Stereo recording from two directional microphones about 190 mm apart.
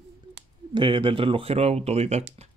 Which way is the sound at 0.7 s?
25° right (ahead or behind).